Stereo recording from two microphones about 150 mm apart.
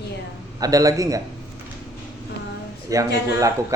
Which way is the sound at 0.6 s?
25° right (ahead or behind).